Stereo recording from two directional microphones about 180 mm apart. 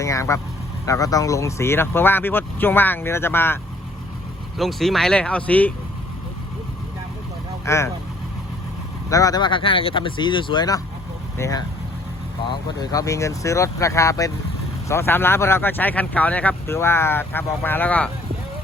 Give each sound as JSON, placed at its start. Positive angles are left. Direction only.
{"t": 0.0, "sound": "vehicle", "side_deg": 15}
{"t": 0.9, "sound": "speech", "side_deg": 20}
{"t": 4.5, "sound": "speech", "side_deg": 0}
{"t": 7.6, "sound": "speech", "side_deg": 15}
{"t": 9.0, "sound": "speech", "side_deg": 20}